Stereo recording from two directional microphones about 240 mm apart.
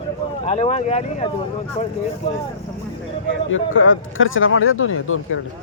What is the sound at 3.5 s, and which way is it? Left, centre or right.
Speech, left.